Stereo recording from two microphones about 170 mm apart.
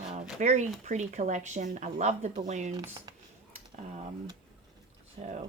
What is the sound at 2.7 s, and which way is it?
Speech, 25° right (ahead or behind).